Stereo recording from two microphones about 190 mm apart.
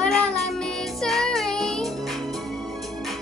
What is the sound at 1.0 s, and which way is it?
Child singing, centre (ahead or behind).